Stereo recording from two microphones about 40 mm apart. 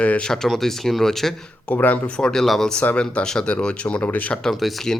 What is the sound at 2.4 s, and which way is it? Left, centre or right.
Speech, centre.